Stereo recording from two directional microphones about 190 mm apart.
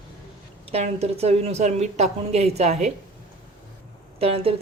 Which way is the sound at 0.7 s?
35° right (ahead or behind).